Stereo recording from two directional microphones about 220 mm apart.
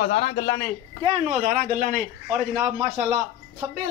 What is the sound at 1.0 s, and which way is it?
Speech, 30° right (ahead or behind).